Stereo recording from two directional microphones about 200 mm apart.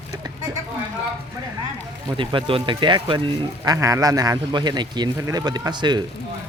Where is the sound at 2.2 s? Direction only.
25° right (ahead or behind).